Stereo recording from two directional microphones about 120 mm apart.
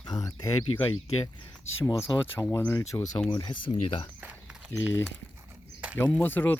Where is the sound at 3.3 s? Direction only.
40° left (ahead or behind).